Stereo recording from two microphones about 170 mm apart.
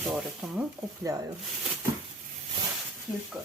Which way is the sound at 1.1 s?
20° right (ahead or behind).